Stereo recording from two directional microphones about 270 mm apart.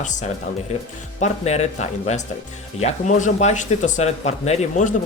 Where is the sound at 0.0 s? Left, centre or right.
Left.